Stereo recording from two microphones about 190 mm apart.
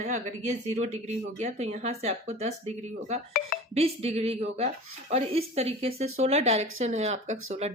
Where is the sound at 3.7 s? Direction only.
30° right (ahead or behind).